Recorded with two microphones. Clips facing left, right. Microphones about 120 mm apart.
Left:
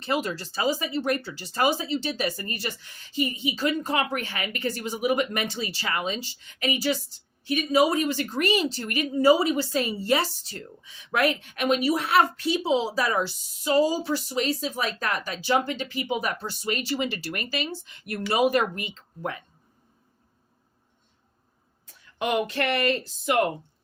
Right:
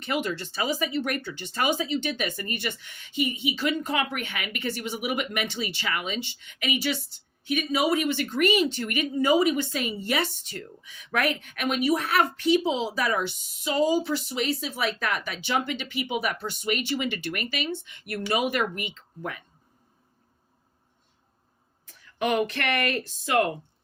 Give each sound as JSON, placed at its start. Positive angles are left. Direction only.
{"t": 0.0, "sound": "a woman's voice", "side_deg": 35}
{"t": 22.5, "sound": "speech", "side_deg": 30}